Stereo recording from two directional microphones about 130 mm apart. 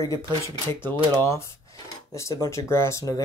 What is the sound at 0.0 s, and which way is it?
Speech, 35° right (ahead or behind).